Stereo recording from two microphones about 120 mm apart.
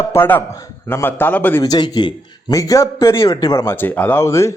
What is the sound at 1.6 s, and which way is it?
A man's voice, 30° left (ahead or behind).